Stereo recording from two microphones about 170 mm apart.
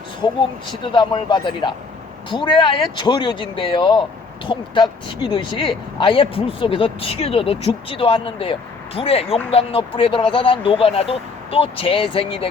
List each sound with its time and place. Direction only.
0.7 s speech: 25° left (ahead or behind)